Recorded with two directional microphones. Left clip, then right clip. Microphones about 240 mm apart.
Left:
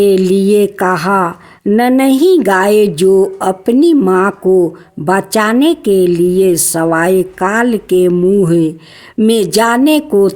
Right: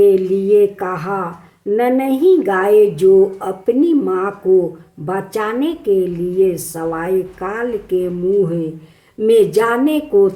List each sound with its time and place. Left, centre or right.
0.0 s a woman's voice: left